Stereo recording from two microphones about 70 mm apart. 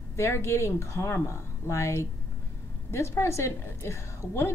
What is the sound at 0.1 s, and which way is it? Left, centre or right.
A woman's voice, left.